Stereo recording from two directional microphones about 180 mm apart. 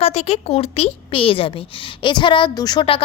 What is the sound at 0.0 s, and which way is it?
A woman's voice, 35° left (ahead or behind).